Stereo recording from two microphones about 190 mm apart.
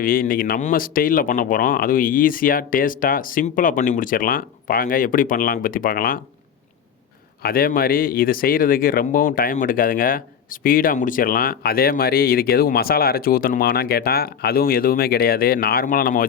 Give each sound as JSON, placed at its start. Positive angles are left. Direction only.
{"t": 0.0, "sound": "speech", "side_deg": 50}
{"t": 7.4, "sound": "speech", "side_deg": 50}